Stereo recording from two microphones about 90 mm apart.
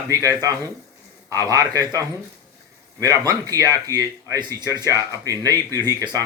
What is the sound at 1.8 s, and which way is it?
Speech, 45° right (ahead or behind).